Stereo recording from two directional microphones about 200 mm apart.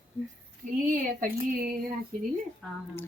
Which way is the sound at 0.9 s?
45° right (ahead or behind).